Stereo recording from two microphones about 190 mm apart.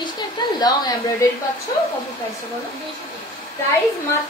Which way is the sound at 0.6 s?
20° left (ahead or behind).